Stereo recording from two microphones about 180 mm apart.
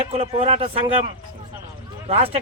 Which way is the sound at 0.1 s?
35° right (ahead or behind).